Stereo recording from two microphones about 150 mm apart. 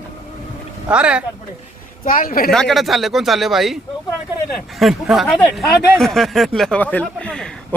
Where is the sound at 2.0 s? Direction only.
70° left (ahead or behind).